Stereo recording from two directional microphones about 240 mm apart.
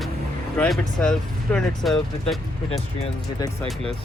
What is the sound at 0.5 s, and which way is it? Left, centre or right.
Speech, centre.